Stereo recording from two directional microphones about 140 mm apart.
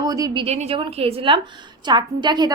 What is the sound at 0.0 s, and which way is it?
Speech, 25° right (ahead or behind).